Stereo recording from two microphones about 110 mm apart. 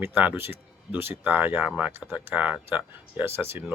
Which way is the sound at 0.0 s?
20° right (ahead or behind).